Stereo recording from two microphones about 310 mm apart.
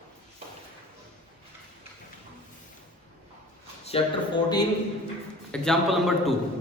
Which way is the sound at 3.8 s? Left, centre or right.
Centre.